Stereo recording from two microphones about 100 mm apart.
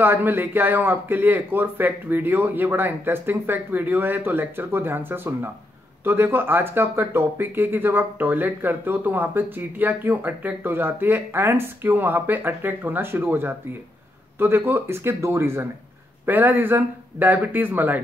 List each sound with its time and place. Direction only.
0.0 s speech: 20° right (ahead or behind)